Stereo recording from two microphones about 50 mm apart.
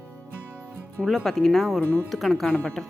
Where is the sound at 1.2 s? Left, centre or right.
Centre.